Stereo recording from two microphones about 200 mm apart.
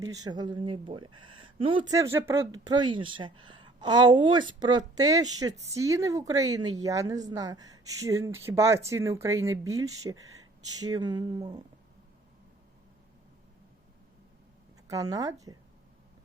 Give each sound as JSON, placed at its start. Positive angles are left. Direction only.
{"t": 0.0, "sound": "speech", "side_deg": -15}
{"t": 14.8, "sound": "speech", "side_deg": -20}